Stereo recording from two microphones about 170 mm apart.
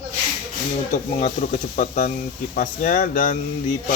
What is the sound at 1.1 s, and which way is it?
Speech, 40° left (ahead or behind).